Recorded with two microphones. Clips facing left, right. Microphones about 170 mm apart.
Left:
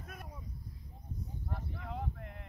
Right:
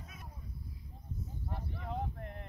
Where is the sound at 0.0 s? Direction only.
60° left (ahead or behind).